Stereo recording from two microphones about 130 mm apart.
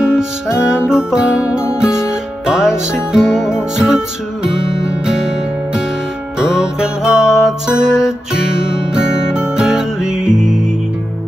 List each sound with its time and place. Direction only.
0.0 s music: 5° right (ahead or behind)
6.4 s music: 5° right (ahead or behind)